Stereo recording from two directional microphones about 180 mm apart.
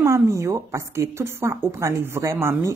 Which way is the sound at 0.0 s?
15° right (ahead or behind).